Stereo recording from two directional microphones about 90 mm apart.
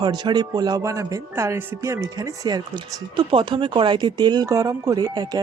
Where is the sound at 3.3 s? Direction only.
70° right (ahead or behind).